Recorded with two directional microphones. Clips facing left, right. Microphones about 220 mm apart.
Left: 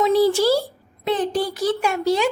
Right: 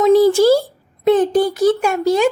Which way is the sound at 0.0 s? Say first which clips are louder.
Right 6 dB; 45° right (ahead or behind).